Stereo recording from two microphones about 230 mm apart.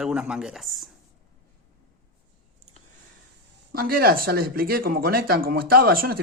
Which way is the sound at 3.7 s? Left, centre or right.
Right.